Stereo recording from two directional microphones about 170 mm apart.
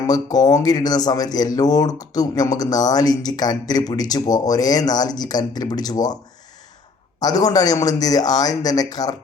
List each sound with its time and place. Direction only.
0.1 s speech: 25° left (ahead or behind)
7.2 s speech: 20° left (ahead or behind)